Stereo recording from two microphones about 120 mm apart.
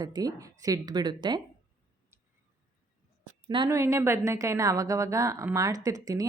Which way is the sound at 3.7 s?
25° right (ahead or behind).